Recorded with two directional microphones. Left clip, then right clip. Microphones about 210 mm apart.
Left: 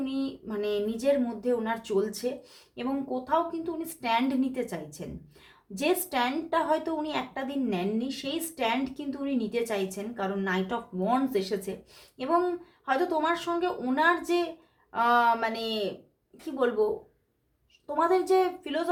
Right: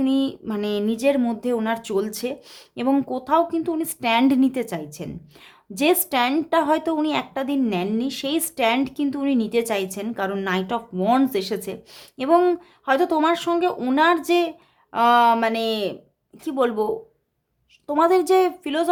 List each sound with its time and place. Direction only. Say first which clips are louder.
0.0 s a woman's voice: right 10 dB; 45° right (ahead or behind)